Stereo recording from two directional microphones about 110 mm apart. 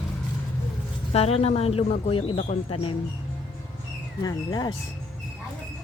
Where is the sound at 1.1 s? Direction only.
65° left (ahead or behind).